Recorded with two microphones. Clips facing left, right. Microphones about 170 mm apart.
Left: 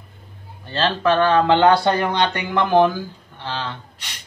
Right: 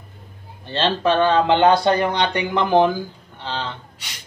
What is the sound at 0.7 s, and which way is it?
Speech, 20° right (ahead or behind).